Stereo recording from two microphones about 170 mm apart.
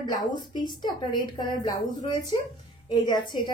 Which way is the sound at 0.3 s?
25° left (ahead or behind).